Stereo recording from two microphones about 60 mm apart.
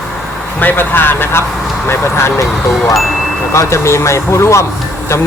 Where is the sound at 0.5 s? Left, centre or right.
Left.